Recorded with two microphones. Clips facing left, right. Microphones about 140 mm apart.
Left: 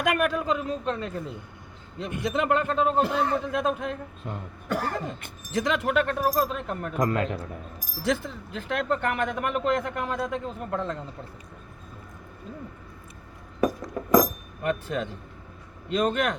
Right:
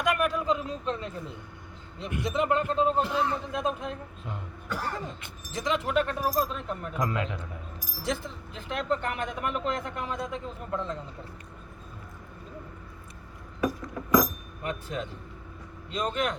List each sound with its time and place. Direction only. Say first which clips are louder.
0.0 s a man's voice: left 2 dB; 65° left (ahead or behind)
2.3 s speech: left 1 dB; 75° left (ahead or behind); by 7.4 s 50° left (ahead or behind)
8.5 s speech: left 3 dB; 65° left (ahead or behind)
13.6 s chink: left 4 dB; 45° left (ahead or behind)
14.6 s speech: left 6 dB; 65° left (ahead or behind)